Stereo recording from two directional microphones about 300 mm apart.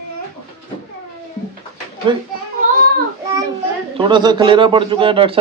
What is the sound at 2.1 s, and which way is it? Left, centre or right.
Speech, centre.